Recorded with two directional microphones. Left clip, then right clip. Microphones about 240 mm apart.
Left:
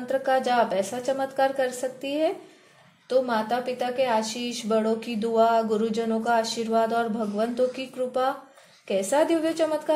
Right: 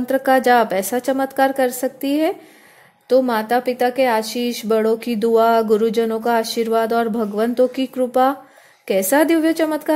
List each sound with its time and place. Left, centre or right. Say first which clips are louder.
0.0 s a woman's voice: right 8 dB; right